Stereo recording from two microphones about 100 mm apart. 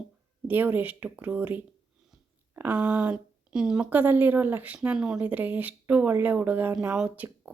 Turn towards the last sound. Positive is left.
turn(degrees=-15)  # may be behind; listen again after turning